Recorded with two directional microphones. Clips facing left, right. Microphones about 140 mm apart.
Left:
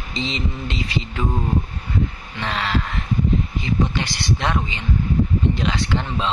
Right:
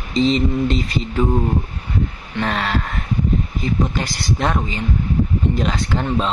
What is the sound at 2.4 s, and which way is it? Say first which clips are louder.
Speech: right 2 dB; 45° right (ahead or behind).